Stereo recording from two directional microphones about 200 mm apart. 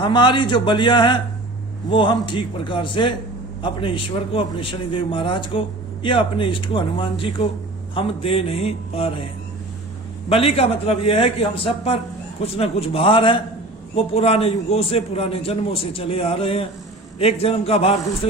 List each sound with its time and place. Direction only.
0.0 s a man's voice: 25° left (ahead or behind)
10.2 s a man's voice: 30° left (ahead or behind)